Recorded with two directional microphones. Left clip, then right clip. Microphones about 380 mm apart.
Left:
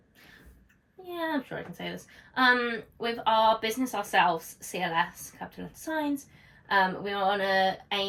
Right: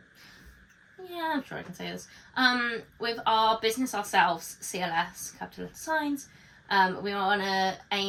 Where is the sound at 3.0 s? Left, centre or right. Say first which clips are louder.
Left 1 dB; centre.